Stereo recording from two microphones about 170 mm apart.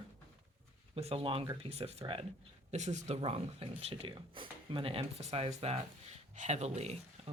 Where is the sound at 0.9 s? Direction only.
35° right (ahead or behind).